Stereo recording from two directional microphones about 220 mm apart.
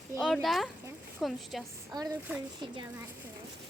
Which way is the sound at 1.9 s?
15° right (ahead or behind).